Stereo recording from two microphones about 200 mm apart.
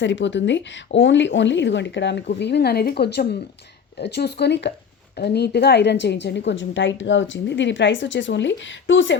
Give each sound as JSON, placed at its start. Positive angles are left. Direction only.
{"t": 0.0, "sound": "a woman's voice", "side_deg": 65}